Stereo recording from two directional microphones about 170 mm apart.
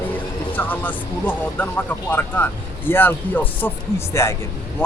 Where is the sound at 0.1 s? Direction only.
10° left (ahead or behind).